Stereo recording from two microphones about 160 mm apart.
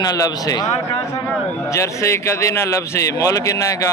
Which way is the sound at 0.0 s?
25° left (ahead or behind).